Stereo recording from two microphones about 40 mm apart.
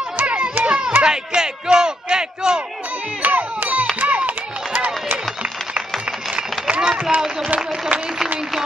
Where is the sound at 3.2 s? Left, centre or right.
Right.